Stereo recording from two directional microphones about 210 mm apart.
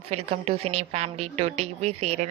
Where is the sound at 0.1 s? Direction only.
30° right (ahead or behind).